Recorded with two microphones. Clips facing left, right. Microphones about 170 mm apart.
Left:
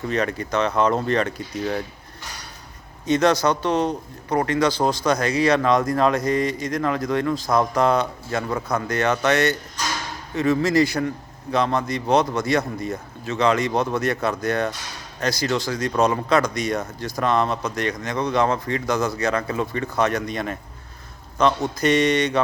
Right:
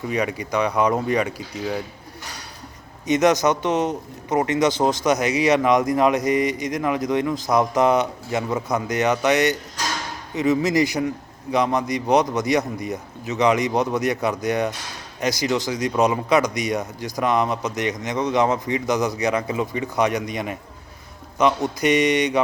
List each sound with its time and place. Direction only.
0.1 s a man's voice: 10° right (ahead or behind)
3.1 s a man's voice: 15° right (ahead or behind)